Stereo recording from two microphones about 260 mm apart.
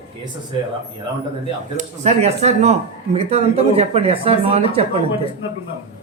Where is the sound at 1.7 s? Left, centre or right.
Right.